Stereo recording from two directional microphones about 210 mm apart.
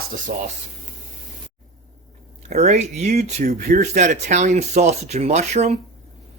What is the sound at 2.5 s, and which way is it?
Speech, 30° right (ahead or behind).